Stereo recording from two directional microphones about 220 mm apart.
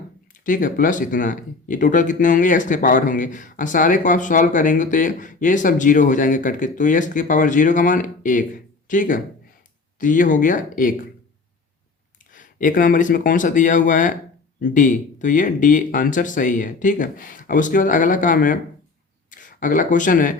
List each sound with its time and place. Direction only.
0.4 s speech: 40° left (ahead or behind)
12.3 s speech: 35° left (ahead or behind)